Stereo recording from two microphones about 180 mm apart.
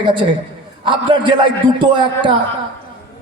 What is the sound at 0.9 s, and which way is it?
Speech, 25° right (ahead or behind).